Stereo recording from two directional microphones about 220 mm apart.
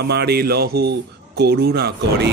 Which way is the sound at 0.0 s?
50° right (ahead or behind).